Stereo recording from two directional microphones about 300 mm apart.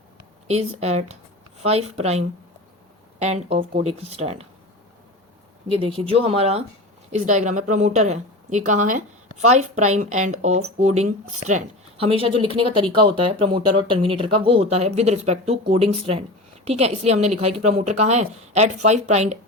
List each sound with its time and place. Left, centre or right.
0.4 s speech: right
5.6 s speech: centre